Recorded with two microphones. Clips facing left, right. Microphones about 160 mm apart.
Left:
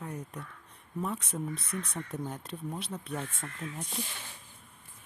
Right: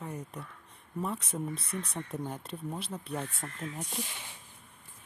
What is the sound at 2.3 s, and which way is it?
Speech, 5° right (ahead or behind).